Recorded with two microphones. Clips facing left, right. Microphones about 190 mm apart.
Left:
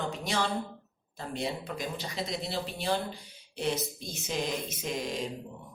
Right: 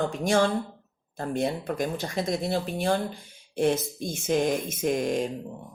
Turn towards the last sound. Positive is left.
turn(degrees=-50)  # may be behind; listen again after turning